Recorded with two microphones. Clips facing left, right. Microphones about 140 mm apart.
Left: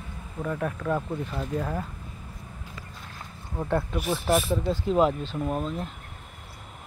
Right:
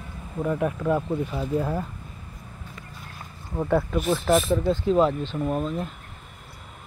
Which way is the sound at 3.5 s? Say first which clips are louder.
Right 4 dB; 10° right (ahead or behind).